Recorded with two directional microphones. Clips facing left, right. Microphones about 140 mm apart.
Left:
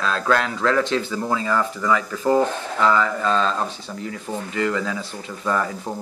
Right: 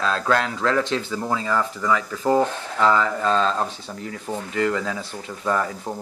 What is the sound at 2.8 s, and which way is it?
Speech, 30° right (ahead or behind).